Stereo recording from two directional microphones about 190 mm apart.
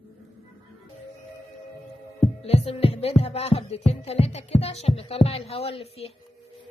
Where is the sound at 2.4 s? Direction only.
30° left (ahead or behind).